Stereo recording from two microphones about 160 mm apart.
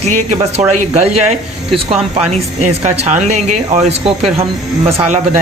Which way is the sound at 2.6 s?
45° right (ahead or behind).